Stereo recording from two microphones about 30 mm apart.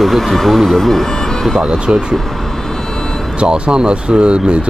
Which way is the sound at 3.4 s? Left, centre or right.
Right.